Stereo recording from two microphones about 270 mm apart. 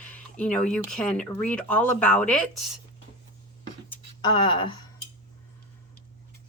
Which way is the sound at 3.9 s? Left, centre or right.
Centre.